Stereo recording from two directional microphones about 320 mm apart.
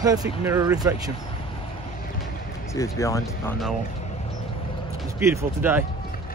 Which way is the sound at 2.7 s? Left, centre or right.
Centre.